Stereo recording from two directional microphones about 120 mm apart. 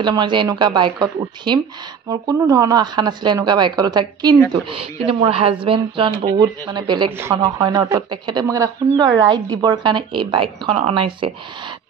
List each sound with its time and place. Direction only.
0.0 s a woman's voice: 40° right (ahead or behind)
4.5 s speech: 45° right (ahead or behind)
6.3 s a woman's voice: 35° right (ahead or behind)